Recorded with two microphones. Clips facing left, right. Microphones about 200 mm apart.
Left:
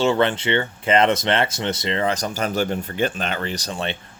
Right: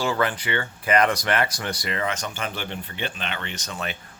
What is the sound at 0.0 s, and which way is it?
Speech, 25° left (ahead or behind).